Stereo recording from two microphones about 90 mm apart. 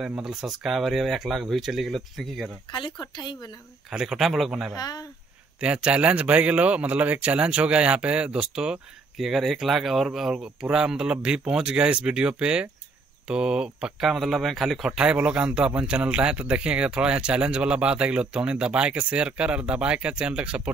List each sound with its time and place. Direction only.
0.0 s speech: 10° right (ahead or behind)
2.7 s speech: 60° left (ahead or behind)
3.9 s speech: 5° right (ahead or behind)
4.7 s speech: 45° left (ahead or behind)
5.6 s speech: 15° right (ahead or behind)
14.9 s speech: 10° right (ahead or behind)